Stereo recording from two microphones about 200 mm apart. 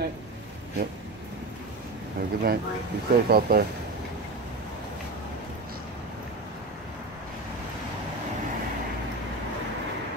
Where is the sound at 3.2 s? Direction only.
50° right (ahead or behind).